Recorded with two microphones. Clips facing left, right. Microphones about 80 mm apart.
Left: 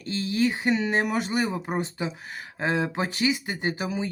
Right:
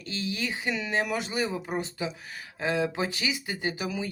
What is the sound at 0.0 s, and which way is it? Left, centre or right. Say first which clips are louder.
Speech: left 8 dB; left.